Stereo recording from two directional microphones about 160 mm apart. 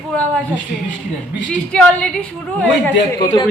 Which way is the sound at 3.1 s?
20° left (ahead or behind).